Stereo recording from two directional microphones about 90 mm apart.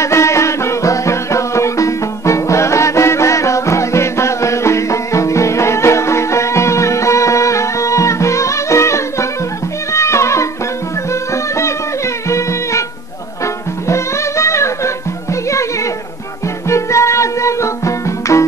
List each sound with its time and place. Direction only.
0.0 s music: 35° left (ahead or behind)
12.3 s music: 35° left (ahead or behind)
13.8 s music: 35° left (ahead or behind)
16.6 s music: 30° left (ahead or behind)